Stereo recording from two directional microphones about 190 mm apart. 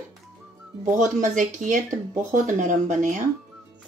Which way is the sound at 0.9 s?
40° right (ahead or behind).